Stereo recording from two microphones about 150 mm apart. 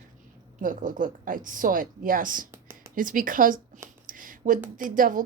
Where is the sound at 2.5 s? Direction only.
20° right (ahead or behind).